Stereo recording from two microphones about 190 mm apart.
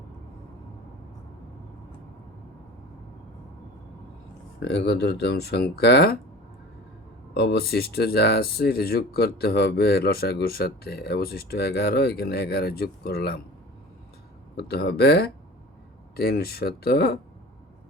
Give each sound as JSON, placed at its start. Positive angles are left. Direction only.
{"t": 4.6, "sound": "speech", "side_deg": 60}
{"t": 7.3, "sound": "speech", "side_deg": 60}
{"t": 14.5, "sound": "speech", "side_deg": 60}